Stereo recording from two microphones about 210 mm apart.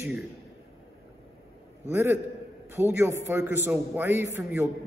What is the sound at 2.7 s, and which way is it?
A man's voice, 10° right (ahead or behind).